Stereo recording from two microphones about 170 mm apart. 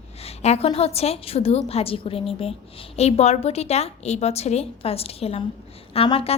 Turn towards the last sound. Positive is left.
turn(degrees=35)  # may be behind; listen again after turning